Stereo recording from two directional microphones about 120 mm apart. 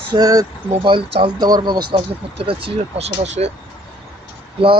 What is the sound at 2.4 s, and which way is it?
Speech, 50° right (ahead or behind).